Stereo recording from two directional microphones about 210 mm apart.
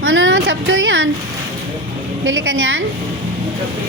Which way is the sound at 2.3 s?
60° right (ahead or behind).